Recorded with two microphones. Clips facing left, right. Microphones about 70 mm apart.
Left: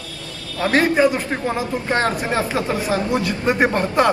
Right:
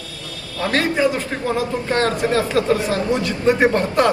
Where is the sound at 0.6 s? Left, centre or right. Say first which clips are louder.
Left 3 dB; centre.